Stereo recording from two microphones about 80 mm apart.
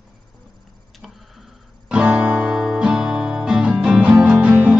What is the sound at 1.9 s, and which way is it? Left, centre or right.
Music, centre.